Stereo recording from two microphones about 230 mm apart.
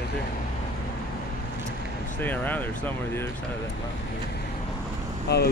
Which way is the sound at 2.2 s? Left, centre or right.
Centre.